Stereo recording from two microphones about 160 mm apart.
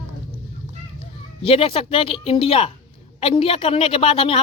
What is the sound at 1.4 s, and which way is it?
Speech, 35° left (ahead or behind).